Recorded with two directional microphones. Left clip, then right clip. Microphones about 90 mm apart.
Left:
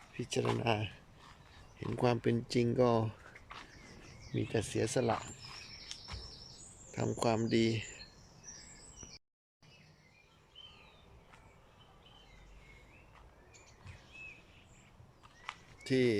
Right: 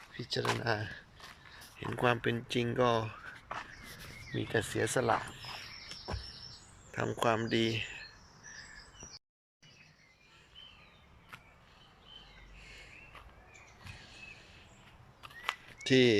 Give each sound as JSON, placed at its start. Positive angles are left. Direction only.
{"t": 0.2, "sound": "speech", "side_deg": 30}
{"t": 1.8, "sound": "speech", "side_deg": 40}
{"t": 4.3, "sound": "speech", "side_deg": 35}
{"t": 6.9, "sound": "speech", "side_deg": 40}
{"t": 15.8, "sound": "speech", "side_deg": 10}